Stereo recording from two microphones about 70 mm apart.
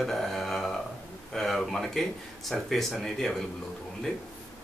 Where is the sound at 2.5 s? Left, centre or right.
Centre.